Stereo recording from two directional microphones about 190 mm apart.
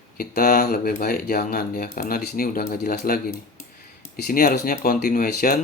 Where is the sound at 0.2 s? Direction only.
50° left (ahead or behind).